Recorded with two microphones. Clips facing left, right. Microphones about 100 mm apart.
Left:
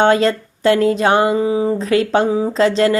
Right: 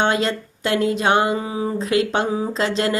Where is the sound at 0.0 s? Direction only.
35° left (ahead or behind).